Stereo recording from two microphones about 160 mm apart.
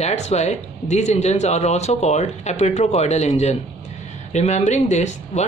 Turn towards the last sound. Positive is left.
turn(degrees=45)  # may be behind; listen again after turning